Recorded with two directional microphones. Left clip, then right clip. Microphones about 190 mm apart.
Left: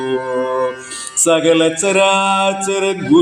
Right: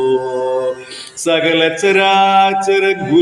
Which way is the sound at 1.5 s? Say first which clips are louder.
Even; 45° left (ahead or behind).